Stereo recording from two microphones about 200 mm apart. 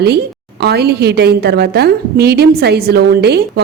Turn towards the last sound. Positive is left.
turn(degrees=-55)  # may be behind; listen again after turning